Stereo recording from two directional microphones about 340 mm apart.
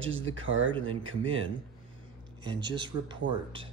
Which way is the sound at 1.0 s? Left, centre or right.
Right.